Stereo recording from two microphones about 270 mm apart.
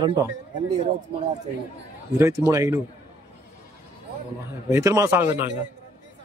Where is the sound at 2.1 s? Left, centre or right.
Centre.